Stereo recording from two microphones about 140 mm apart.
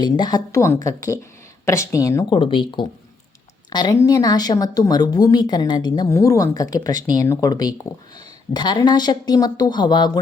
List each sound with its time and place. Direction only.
0.0 s speech: 30° left (ahead or behind)
2.3 s speech: 35° left (ahead or behind)